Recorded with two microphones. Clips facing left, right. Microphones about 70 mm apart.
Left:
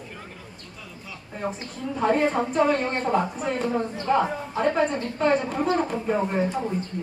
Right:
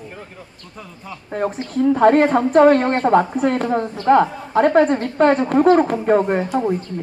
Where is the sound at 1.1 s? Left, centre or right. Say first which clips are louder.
Right 8 dB; right.